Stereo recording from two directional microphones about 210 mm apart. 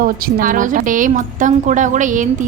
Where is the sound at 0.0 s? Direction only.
40° right (ahead or behind).